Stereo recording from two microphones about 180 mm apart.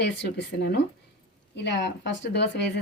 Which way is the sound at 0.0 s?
70° left (ahead or behind).